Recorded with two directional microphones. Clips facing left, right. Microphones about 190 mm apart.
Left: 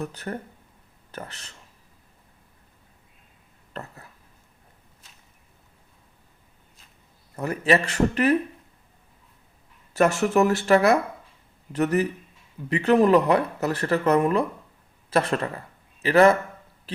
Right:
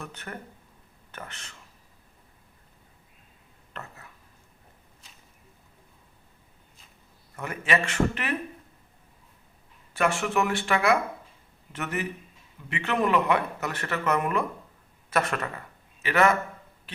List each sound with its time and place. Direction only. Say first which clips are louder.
0.0 s speech: left 7 dB; 35° left (ahead or behind)
3.7 s whispering: left 4 dB; 35° left (ahead or behind)
7.3 s speech: left 6 dB; 35° left (ahead or behind)
9.9 s a man's voice: left 6 dB; 40° left (ahead or behind)